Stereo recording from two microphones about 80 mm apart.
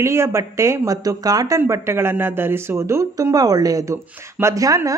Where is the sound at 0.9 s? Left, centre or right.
Right.